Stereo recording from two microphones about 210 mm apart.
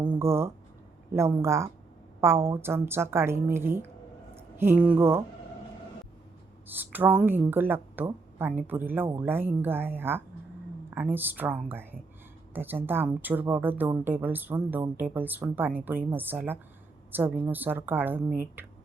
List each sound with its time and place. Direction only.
0.2 s speech: 10° right (ahead or behind)
6.7 s speech: 10° right (ahead or behind)